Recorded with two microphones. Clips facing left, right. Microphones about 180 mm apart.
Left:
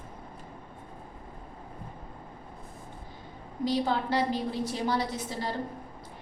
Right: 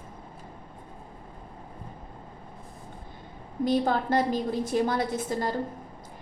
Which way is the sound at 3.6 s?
50° right (ahead or behind).